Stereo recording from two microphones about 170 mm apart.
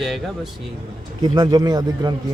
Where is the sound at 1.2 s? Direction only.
25° right (ahead or behind).